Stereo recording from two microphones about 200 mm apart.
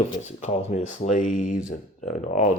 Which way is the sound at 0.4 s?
35° left (ahead or behind).